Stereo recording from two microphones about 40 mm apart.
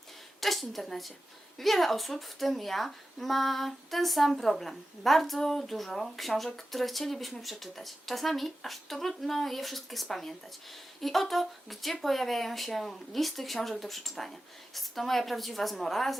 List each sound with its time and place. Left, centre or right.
0.3 s speech: centre